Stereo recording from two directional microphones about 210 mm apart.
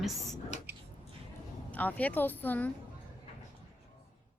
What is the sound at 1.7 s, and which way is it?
Speech, 5° left (ahead or behind).